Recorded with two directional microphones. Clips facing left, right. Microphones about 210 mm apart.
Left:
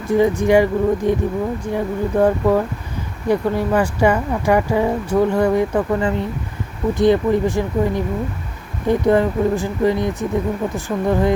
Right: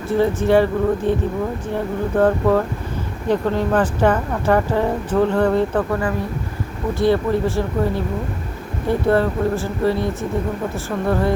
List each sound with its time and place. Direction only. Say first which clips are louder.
0.1 s speech: left 2 dB; 15° left (ahead or behind)